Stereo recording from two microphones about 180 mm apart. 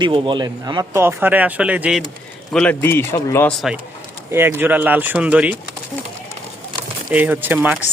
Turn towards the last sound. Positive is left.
turn(degrees=-5)  # may be behind; listen again after turning